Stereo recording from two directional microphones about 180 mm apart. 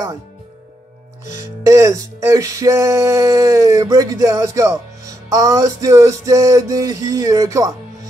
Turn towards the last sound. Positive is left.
turn(degrees=-20)  # may be behind; listen again after turning